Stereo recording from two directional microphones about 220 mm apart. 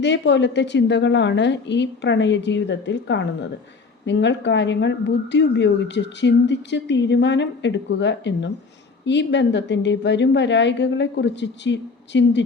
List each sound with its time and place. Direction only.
0.0 s a woman's voice: 55° left (ahead or behind)